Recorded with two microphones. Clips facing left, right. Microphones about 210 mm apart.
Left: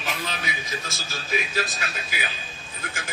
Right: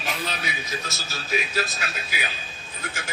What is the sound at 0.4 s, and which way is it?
Speech, 50° left (ahead or behind).